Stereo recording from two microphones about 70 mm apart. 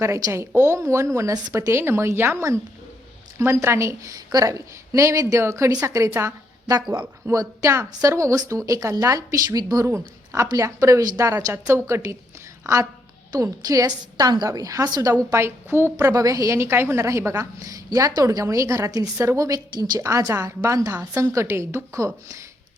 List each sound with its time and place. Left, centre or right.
0.0 s a woman's voice: right
9.8 s a woman's voice: right
12.6 s a woman's voice: right
15.3 s a woman's voice: right
16.0 s a woman's voice: right
16.6 s a woman's voice: right
17.6 s a woman's voice: right
20.0 s a woman's voice: right
20.9 s a woman's voice: right
21.4 s a woman's voice: right